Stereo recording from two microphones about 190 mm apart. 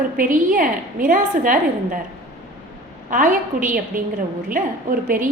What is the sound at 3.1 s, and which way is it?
A woman's voice, 45° right (ahead or behind).